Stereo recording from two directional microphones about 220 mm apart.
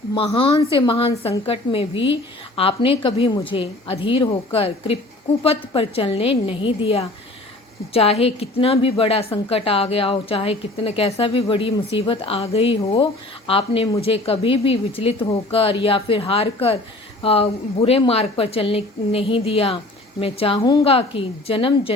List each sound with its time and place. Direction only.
0.1 s a woman's voice: 25° left (ahead or behind)